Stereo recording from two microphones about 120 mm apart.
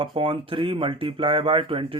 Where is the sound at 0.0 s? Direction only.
45° right (ahead or behind).